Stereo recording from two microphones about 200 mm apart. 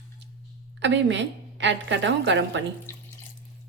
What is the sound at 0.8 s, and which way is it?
A woman's voice, 65° right (ahead or behind).